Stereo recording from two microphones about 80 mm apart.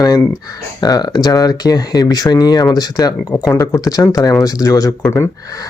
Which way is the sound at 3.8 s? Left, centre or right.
Left.